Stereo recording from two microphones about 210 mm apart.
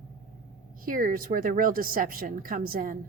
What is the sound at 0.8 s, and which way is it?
A woman's voice, 40° right (ahead or behind).